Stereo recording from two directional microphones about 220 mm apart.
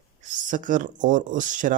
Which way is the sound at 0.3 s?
35° right (ahead or behind).